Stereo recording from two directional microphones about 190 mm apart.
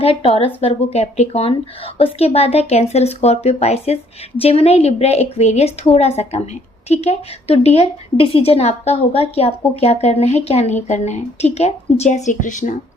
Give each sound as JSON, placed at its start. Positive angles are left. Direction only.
{"t": 0.0, "sound": "a woman's voice", "side_deg": 30}